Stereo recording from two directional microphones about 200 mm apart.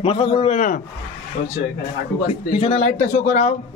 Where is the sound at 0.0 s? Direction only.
25° left (ahead or behind).